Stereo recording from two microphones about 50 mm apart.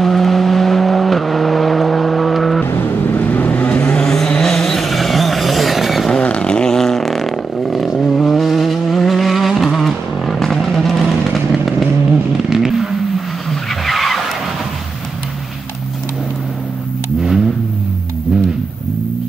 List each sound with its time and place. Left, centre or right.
0.0 s vehicle: centre
3.1 s vehicle: left
4.0 s vehicle: centre
6.1 s vehicle: left; by 14.2 s centre